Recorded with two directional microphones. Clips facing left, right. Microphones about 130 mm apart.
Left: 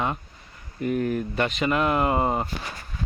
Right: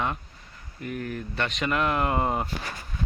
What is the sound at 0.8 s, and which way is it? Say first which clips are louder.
Speech: left 8 dB; 20° left (ahead or behind).